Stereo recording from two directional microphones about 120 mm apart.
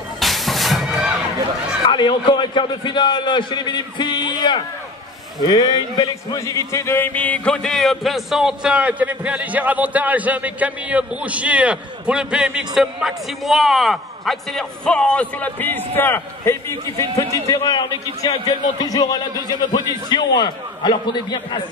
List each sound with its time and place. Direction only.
0.2 s music: centre (ahead or behind)
1.9 s a man's voice: 40° left (ahead or behind)